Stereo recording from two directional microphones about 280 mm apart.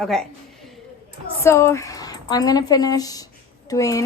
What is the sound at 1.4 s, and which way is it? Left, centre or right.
A woman's voice, centre.